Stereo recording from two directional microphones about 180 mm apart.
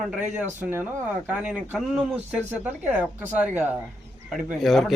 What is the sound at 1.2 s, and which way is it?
A man's voice, 5° right (ahead or behind).